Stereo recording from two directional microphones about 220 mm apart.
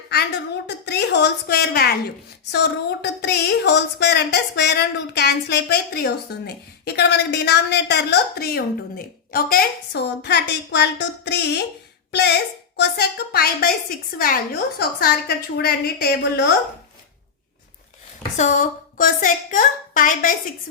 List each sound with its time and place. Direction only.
0.7 s a woman's voice: 50° left (ahead or behind)
18.3 s a woman's voice: 35° left (ahead or behind)